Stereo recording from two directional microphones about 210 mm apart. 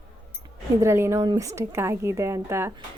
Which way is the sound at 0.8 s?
10° right (ahead or behind).